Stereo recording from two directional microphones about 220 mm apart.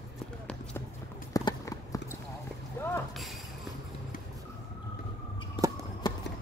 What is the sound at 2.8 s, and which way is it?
Boat, 10° left (ahead or behind).